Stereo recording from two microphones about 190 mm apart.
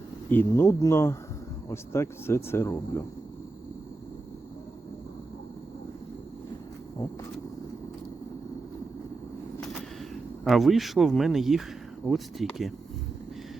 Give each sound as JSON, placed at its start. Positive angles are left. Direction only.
{"t": 0.3, "sound": "speech", "side_deg": 10}
{"t": 9.6, "sound": "a sound", "side_deg": 0}
{"t": 12.0, "sound": "speech", "side_deg": 0}